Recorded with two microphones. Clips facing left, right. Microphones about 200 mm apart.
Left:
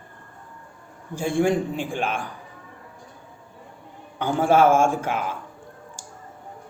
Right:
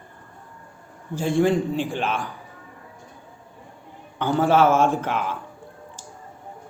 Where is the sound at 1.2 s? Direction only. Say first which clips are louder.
Right 2 dB; 15° left (ahead or behind).